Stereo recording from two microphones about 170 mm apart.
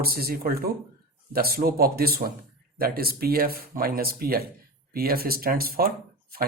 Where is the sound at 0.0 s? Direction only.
65° right (ahead or behind).